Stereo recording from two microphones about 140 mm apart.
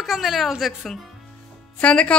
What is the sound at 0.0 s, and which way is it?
A woman's voice, centre (ahead or behind).